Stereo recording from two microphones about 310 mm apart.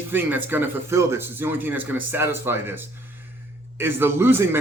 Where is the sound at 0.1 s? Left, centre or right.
Centre.